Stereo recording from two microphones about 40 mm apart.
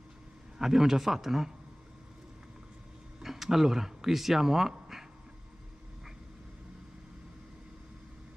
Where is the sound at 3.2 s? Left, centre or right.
Centre.